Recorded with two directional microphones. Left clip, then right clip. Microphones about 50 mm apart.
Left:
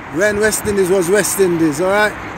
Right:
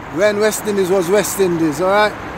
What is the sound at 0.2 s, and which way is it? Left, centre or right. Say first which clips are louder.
Speech: even; left.